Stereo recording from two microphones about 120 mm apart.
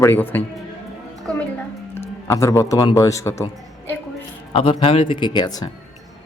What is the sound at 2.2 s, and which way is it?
Speech, 25° left (ahead or behind).